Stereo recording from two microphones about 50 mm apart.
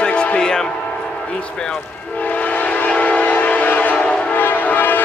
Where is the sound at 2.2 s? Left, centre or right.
Left.